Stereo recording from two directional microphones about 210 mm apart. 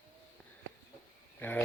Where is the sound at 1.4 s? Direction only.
10° left (ahead or behind).